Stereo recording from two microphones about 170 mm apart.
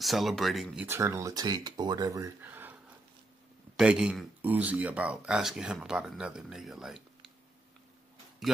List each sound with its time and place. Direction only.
0.0 s speech: centre (ahead or behind)
0.8 s speech: 15° right (ahead or behind)
3.7 s speech: 5° right (ahead or behind)